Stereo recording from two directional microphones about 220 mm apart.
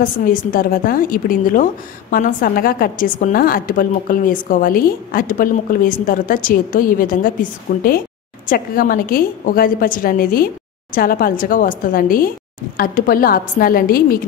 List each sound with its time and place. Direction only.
0.0 s a woman's voice: 40° left (ahead or behind)